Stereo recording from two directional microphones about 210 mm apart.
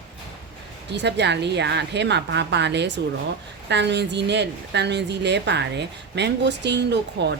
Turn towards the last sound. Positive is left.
turn(degrees=-55)  # may be behind; listen again after turning